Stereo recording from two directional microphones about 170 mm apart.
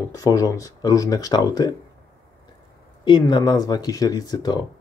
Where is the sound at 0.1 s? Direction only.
20° left (ahead or behind).